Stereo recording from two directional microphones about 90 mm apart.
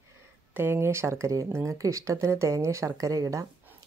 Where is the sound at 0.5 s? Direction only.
25° right (ahead or behind).